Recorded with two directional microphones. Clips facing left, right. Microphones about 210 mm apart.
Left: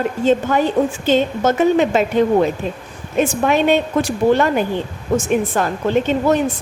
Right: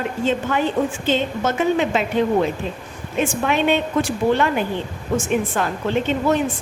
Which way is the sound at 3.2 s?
40° left (ahead or behind).